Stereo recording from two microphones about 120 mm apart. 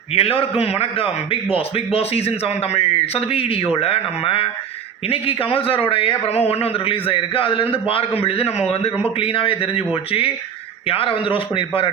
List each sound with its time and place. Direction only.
0.1 s a man's voice: 55° left (ahead or behind)